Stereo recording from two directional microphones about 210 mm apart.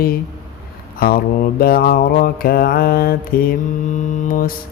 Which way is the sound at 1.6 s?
45° left (ahead or behind).